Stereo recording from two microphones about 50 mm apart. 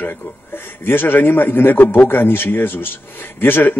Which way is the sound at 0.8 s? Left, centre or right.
Left.